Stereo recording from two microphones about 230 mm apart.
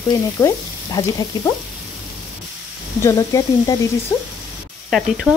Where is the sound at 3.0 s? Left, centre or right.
Centre.